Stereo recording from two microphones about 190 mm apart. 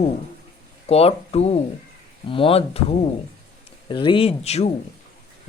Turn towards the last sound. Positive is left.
turn(degrees=35)  # may be behind; listen again after turning